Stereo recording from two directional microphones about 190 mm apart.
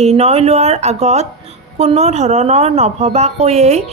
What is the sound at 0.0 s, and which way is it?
A woman's voice, 35° right (ahead or behind).